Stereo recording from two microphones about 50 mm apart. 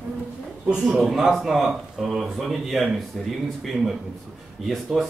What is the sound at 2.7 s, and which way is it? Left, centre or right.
Speech, centre.